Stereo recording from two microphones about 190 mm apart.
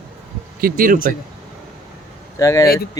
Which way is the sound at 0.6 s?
50° right (ahead or behind).